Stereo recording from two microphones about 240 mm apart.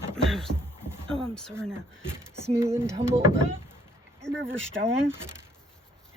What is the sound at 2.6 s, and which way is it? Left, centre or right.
Speech, centre.